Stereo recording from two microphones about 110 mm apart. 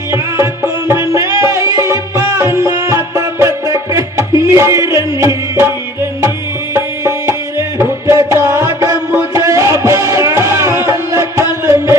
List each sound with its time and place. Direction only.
0.1 s music: 25° right (ahead or behind)
6.7 s music: 25° right (ahead or behind)